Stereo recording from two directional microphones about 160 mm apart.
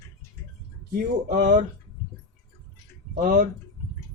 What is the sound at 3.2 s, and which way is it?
Speech, 60° right (ahead or behind).